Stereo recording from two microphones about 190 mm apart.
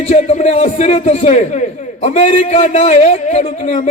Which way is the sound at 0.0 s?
35° left (ahead or behind).